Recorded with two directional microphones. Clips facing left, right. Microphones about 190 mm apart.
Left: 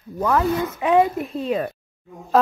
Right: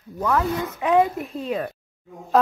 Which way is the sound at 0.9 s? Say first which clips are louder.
Left 1 dB; centre (ahead or behind).